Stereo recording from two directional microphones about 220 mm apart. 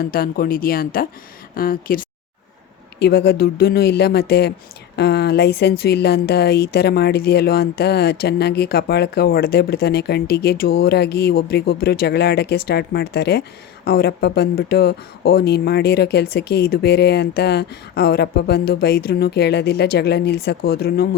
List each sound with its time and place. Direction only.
0.0 s speech: 40° left (ahead or behind)